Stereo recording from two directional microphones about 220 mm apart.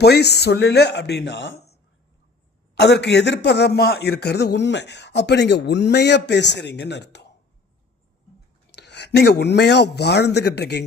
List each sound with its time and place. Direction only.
0.0 s a man's voice: 50° left (ahead or behind)
8.7 s speech: 50° left (ahead or behind)